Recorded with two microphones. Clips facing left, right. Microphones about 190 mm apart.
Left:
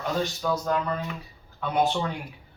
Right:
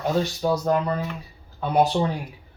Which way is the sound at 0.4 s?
30° right (ahead or behind).